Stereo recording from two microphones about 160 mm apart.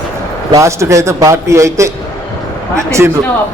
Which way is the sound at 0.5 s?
20° right (ahead or behind).